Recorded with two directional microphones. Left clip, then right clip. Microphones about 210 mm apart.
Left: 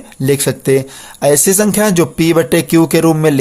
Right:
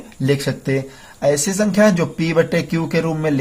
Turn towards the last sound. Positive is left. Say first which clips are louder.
# left 8 dB
turn(degrees=50)  # may be behind; listen again after turning